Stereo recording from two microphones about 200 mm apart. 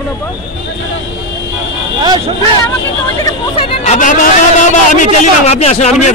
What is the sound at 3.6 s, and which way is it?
Speech, 35° left (ahead or behind).